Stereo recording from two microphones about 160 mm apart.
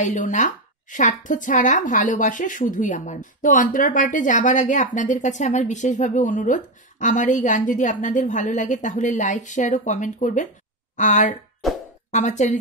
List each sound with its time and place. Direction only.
0.0 s speech: 50° left (ahead or behind)